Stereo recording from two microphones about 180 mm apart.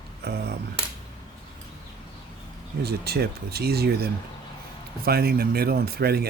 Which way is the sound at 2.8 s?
60° right (ahead or behind).